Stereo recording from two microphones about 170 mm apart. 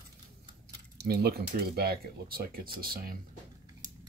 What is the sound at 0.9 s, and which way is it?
Speech, 70° right (ahead or behind).